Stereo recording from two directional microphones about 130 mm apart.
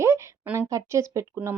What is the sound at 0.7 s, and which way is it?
Speech, 25° right (ahead or behind).